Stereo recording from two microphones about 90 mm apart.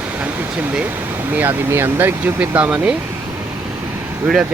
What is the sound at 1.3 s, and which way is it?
Speech, 20° right (ahead or behind).